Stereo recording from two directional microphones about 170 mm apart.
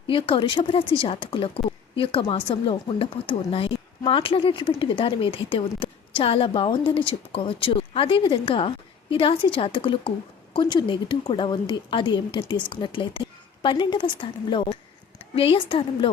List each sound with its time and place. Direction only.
0.1 s a woman's voice: 30° left (ahead or behind)